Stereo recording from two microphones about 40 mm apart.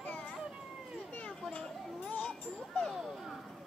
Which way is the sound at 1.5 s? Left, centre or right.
Left.